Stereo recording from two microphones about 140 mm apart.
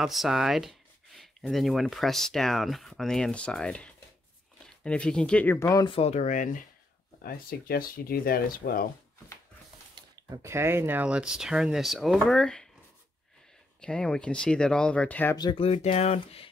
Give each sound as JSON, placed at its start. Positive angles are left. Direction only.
{"t": 0.0, "sound": "speech", "side_deg": 0}
{"t": 5.9, "sound": "speech", "side_deg": 45}
{"t": 7.2, "sound": "speech", "side_deg": 90}
{"t": 9.9, "sound": "speech", "side_deg": -30}
{"t": 13.7, "sound": "speech", "side_deg": 5}
{"t": 15.3, "sound": "speech", "side_deg": 30}
{"t": 15.6, "sound": "speech", "side_deg": 45}